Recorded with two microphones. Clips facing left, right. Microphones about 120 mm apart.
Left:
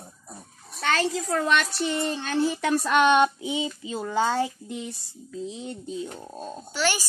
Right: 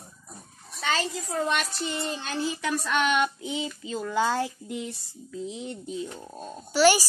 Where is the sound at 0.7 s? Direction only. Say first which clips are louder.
Left 4 dB; 65° left (ahead or behind).